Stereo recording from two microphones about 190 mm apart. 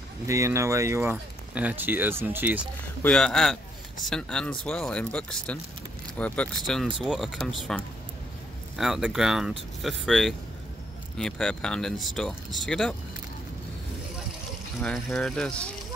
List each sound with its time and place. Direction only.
0.3 s speech: 15° right (ahead or behind)
3.0 s speech: 5° left (ahead or behind)
14.8 s speech: centre (ahead or behind)